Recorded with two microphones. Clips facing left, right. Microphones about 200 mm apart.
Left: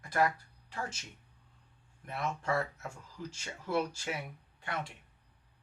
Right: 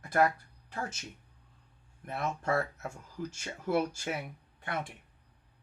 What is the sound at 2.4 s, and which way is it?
Speech, 50° right (ahead or behind).